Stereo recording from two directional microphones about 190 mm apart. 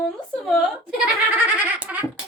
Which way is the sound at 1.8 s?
5° right (ahead or behind).